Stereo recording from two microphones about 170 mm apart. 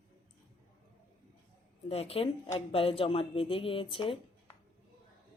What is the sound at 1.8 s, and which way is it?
Speech, 35° left (ahead or behind).